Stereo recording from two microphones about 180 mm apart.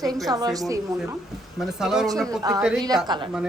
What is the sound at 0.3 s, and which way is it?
Speech, 20° right (ahead or behind).